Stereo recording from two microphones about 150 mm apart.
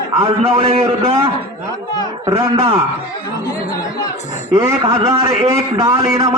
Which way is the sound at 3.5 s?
25° left (ahead or behind).